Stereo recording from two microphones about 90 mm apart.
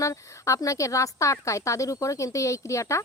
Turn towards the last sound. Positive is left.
turn(degrees=35)  # may be behind; listen again after turning